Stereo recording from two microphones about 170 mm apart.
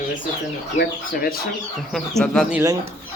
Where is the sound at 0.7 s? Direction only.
60° left (ahead or behind).